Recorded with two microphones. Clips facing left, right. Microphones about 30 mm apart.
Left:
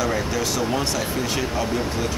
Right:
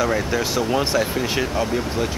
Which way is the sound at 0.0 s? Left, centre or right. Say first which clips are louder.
Right 2 dB; right.